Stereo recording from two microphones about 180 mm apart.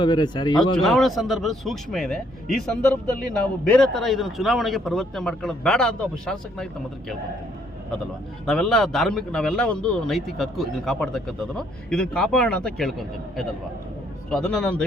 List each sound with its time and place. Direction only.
0.0 s speech: 25° left (ahead or behind)
0.8 s a man's voice: centre (ahead or behind)
8.4 s a man's voice: centre (ahead or behind)